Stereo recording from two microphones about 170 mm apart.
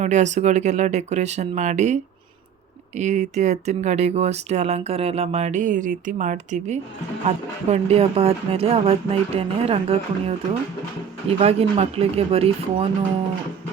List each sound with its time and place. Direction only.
0.0 s speech: 45° right (ahead or behind)